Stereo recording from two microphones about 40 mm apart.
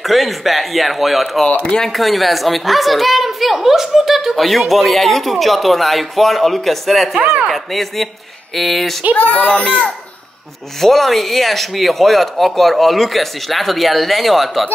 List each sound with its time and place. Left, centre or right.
0.0 s a woman's voice: centre
1.5 s speech: left
1.8 s a woman's voice: centre
9.1 s speech: left
9.5 s a child's voice: left
10.8 s a woman's voice: centre